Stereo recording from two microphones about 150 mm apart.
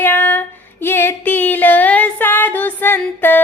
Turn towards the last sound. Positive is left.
turn(degrees=15)  # may be behind; listen again after turning